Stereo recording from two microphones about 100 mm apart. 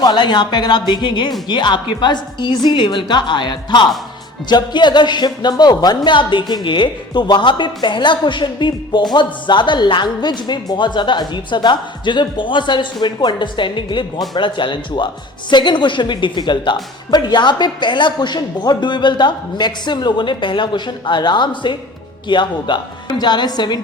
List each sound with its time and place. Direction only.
0.0 s speech: 50° left (ahead or behind)